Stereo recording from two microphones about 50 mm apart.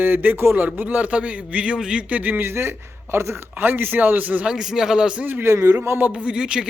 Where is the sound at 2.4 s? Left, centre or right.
Right.